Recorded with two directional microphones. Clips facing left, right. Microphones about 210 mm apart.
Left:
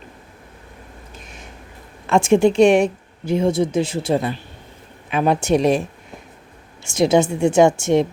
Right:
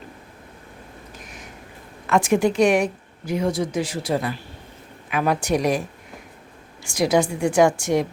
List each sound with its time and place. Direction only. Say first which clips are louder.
2.0 s speech: left 4 dB; 25° left (ahead or behind)
6.8 s speech: left 4 dB; 25° left (ahead or behind)